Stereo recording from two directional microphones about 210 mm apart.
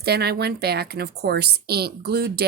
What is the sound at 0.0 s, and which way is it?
A woman's voice, 50° right (ahead or behind).